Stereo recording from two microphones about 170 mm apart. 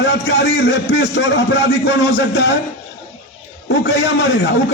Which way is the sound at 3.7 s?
90° left.